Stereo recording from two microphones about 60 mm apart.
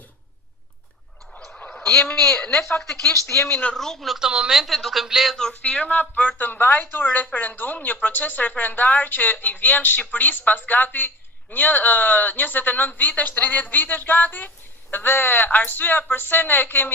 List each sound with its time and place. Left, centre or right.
2.0 s speech: left
2.7 s speech: centre
3.2 s speech: left
3.8 s speech: centre
4.2 s speech: centre
5.6 s speech: left